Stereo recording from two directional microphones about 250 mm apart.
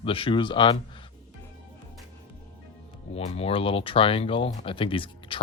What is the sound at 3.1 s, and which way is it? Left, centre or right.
Speech, left.